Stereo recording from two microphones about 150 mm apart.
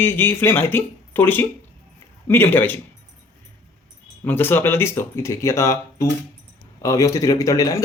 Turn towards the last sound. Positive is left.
turn(degrees=25)  # may be behind; listen again after turning